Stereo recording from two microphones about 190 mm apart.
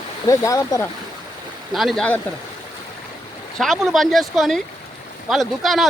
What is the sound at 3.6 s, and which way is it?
Speech, centre (ahead or behind).